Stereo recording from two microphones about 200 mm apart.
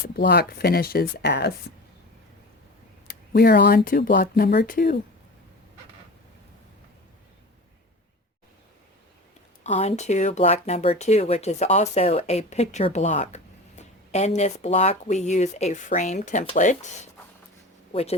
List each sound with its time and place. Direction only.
0.2 s speech: 55° left (ahead or behind)
3.1 s speech: 50° left (ahead or behind)
9.6 s speech: 35° left (ahead or behind)